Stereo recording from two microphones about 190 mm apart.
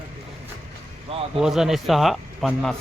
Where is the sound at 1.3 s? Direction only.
Centre (ahead or behind).